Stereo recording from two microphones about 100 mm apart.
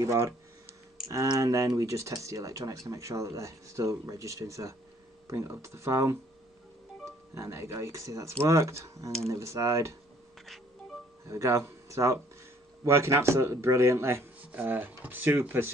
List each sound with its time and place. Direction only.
0.0 s speech: 30° right (ahead or behind)
11.2 s speech: 30° right (ahead or behind)